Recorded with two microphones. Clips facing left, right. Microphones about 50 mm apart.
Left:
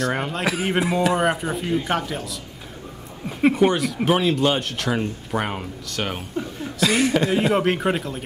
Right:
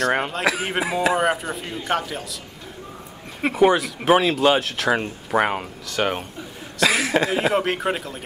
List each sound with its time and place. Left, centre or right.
0.3 s speech: centre
4.9 s speech: right
5.9 s speech: centre